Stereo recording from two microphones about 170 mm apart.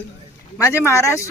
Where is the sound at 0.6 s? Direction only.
15° left (ahead or behind).